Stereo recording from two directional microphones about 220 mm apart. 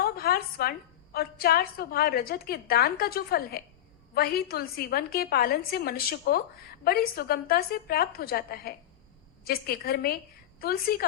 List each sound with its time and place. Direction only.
0.0 s a woman's voice: 45° left (ahead or behind)